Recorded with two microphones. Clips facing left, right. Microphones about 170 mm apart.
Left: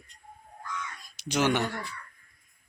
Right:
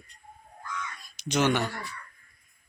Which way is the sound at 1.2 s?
10° left (ahead or behind).